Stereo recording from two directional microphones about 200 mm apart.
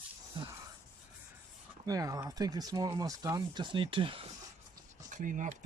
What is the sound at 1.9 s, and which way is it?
Speech, 15° right (ahead or behind).